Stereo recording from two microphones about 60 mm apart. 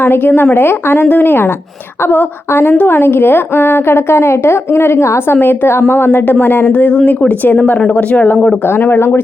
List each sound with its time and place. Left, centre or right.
0.0 s a woman's voice: left
8.6 s a woman's voice: left